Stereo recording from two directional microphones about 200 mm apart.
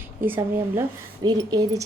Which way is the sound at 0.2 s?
10° right (ahead or behind).